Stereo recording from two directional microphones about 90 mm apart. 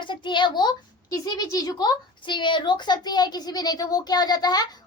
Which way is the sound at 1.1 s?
45° left (ahead or behind).